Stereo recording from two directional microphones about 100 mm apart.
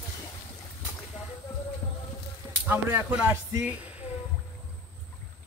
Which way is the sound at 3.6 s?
15° right (ahead or behind).